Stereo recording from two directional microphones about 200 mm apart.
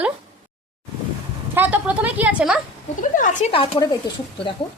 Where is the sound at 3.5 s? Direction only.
25° left (ahead or behind).